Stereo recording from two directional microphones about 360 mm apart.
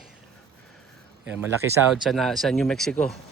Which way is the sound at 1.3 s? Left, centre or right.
Centre.